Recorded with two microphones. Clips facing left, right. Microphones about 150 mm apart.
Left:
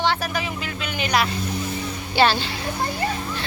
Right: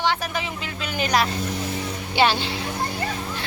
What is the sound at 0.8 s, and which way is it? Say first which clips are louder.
Music: right 1 dB; 40° right (ahead or behind).